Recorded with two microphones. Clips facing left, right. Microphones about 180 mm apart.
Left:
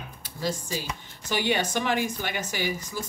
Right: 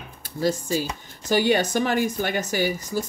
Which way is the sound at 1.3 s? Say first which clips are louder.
Right 6 dB; 45° right (ahead or behind).